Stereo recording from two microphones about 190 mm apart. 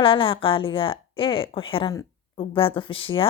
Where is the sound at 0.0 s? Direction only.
30° left (ahead or behind).